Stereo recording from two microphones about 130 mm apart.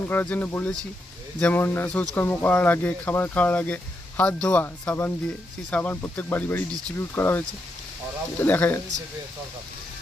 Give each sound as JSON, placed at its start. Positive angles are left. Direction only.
{"t": 0.1, "sound": "speech", "side_deg": 15}